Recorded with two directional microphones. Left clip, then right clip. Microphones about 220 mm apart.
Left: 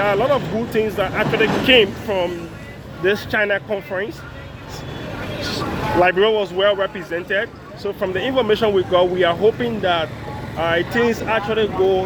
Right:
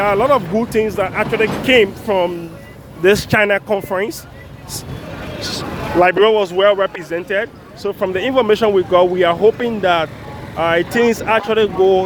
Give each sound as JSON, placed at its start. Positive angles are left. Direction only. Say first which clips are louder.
{"t": 0.0, "sound": "speech", "louder": "right 4 dB", "side_deg": -20}
{"t": 5.4, "sound": "speech", "louder": "even", "side_deg": -35}